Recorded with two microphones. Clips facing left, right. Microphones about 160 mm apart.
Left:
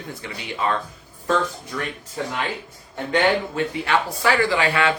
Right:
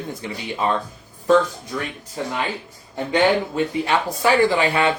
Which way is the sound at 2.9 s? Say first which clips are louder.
Right 2 dB; 15° right (ahead or behind).